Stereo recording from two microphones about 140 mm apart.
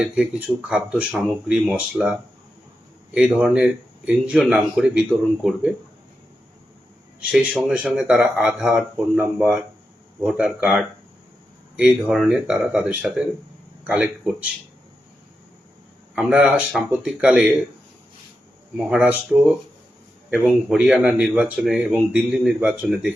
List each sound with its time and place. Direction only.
0.0 s speech: 10° right (ahead or behind)
7.2 s speech: 5° right (ahead or behind)
16.1 s speech: 5° right (ahead or behind)
18.8 s speech: 10° right (ahead or behind)